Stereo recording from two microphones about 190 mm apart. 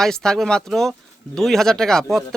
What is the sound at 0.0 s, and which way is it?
A man's voice, 5° left (ahead or behind).